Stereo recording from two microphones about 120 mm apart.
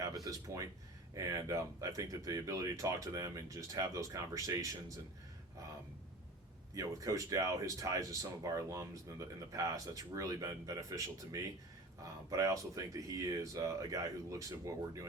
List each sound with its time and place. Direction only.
0.3 s speech: 30° right (ahead or behind)
6.7 s speech: 25° right (ahead or behind)